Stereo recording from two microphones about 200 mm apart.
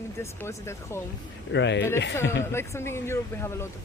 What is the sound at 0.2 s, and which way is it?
Speech, 15° left (ahead or behind).